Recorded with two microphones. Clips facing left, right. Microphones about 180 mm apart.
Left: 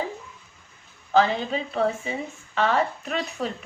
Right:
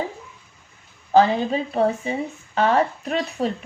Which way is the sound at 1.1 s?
40° right (ahead or behind).